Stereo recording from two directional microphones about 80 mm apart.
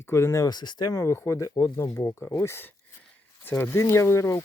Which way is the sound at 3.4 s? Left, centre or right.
Left.